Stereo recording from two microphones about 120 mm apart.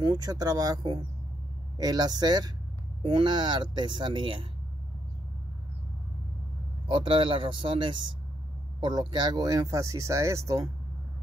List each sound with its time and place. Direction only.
0.0 s speech: 30° right (ahead or behind)
6.9 s speech: 45° right (ahead or behind); by 10.7 s 25° right (ahead or behind)